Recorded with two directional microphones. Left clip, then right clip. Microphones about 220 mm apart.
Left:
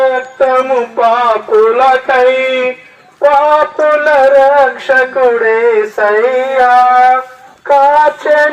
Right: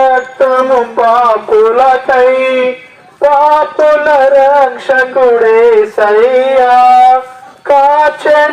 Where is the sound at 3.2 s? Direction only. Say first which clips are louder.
Right 1 dB; 25° left (ahead or behind).